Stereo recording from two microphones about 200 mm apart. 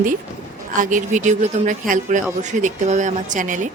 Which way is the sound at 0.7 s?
40° right (ahead or behind).